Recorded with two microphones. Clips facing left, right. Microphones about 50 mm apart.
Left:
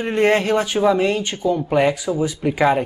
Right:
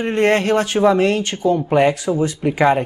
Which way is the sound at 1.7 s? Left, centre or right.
Centre.